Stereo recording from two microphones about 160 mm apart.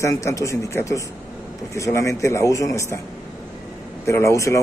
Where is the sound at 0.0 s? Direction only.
20° left (ahead or behind).